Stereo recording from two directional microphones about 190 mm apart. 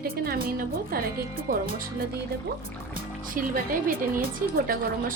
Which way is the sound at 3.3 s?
45° right (ahead or behind).